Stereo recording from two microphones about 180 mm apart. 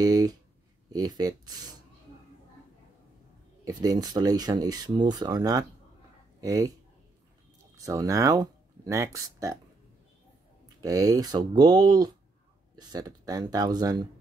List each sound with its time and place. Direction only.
0.0 s speech: 20° right (ahead or behind)
3.6 s speech: 20° right (ahead or behind)
7.7 s speech: 20° right (ahead or behind)
10.8 s speech: 20° right (ahead or behind)